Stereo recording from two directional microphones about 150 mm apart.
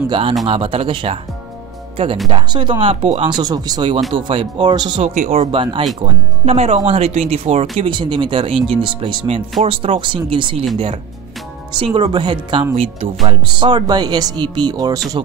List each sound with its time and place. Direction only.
0.1 s speech: 35° right (ahead or behind)
2.2 s speech: 30° right (ahead or behind)
3.3 s speech: 25° right (ahead or behind)
5.0 s speech: 50° right (ahead or behind)
5.4 s speech: 35° right (ahead or behind)
7.8 s speech: 35° right (ahead or behind)
11.8 s speech: 30° right (ahead or behind)